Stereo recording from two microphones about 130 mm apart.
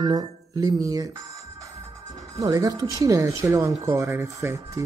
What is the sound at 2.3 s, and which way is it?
Speech, 25° right (ahead or behind).